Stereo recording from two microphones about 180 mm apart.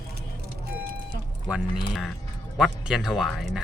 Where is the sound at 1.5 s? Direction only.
Centre (ahead or behind).